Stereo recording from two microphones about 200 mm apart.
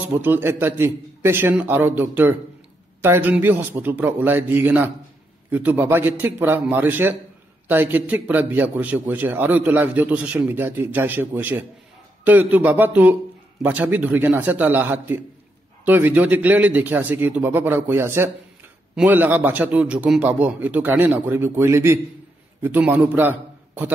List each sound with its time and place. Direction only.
0.2 s a man's voice: 10° right (ahead or behind)